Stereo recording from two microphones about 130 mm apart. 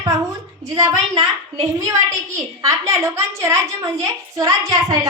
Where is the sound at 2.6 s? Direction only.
25° right (ahead or behind).